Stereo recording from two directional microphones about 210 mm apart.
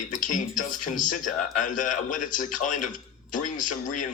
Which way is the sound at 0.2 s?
40° left (ahead or behind).